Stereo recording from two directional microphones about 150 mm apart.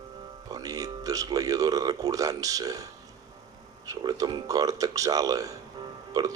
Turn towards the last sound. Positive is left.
turn(degrees=-25)  # may be behind; listen again after turning